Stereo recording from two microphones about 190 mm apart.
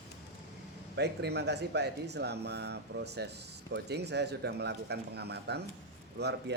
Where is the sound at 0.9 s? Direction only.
60° right (ahead or behind).